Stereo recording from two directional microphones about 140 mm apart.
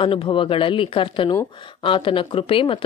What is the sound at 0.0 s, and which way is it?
Speech, 40° left (ahead or behind).